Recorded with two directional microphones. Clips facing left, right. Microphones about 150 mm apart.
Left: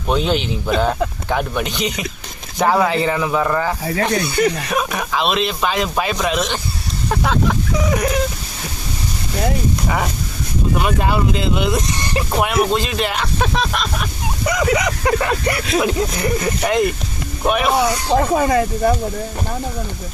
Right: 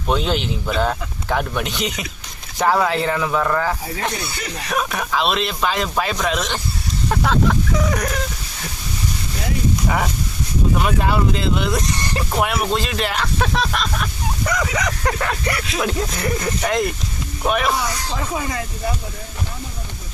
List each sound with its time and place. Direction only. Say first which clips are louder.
0.1 s speech: left 2 dB; centre (ahead or behind)
4.1 s speech: left 12 dB; 60° left (ahead or behind)
4.7 s speech: left 1 dB; 5° left (ahead or behind)
10.8 s speech: left 2 dB; 5° left (ahead or behind)
17.7 s speech: left 9 dB; 60° left (ahead or behind)